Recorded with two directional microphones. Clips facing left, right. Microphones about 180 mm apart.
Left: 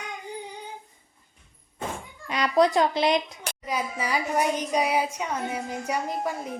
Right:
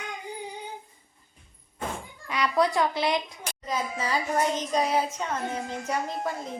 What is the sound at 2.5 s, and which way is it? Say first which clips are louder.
A woman's voice: left 4 dB; 20° left (ahead or behind).